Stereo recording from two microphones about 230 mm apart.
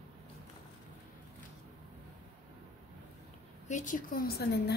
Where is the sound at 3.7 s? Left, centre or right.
Left.